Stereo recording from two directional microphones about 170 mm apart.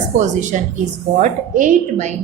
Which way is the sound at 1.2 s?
45° right (ahead or behind).